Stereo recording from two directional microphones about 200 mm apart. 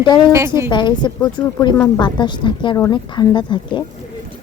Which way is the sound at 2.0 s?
20° left (ahead or behind).